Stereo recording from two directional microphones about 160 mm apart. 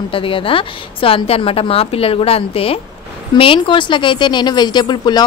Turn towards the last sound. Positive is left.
turn(degrees=25)  # may be behind; listen again after turning